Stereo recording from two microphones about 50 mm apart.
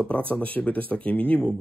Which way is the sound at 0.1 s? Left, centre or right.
Left.